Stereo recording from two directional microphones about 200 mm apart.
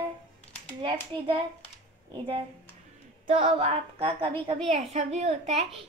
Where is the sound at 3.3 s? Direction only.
30° right (ahead or behind).